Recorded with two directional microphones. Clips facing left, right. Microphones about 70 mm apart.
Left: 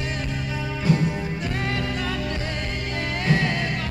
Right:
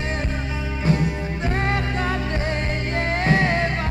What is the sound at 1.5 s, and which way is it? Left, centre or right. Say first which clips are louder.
Music: right 5 dB; right.